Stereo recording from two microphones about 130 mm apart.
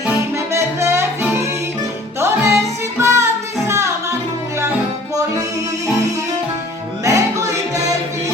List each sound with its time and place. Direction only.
0.3 s music: 20° right (ahead or behind)
7.0 s music: 25° right (ahead or behind)